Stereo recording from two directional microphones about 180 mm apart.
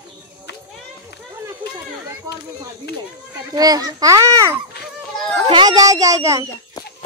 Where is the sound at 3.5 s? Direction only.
20° right (ahead or behind).